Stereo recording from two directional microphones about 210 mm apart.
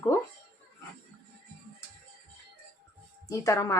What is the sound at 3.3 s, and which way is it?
Speech, 15° left (ahead or behind).